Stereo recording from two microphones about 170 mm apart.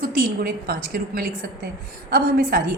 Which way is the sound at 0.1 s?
60° right (ahead or behind).